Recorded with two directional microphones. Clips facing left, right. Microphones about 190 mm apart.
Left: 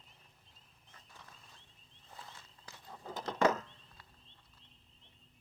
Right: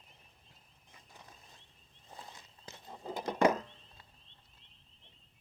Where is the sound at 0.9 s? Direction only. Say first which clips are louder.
Right 2 dB; 15° right (ahead or behind).